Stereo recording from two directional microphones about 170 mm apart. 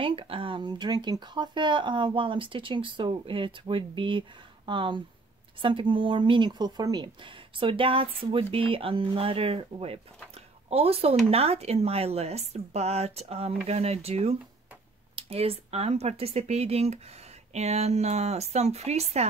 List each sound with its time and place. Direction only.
0.0 s a woman's voice: 30° right (ahead or behind)